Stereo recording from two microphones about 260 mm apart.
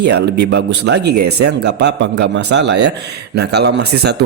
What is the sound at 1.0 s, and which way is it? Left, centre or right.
Speech, right.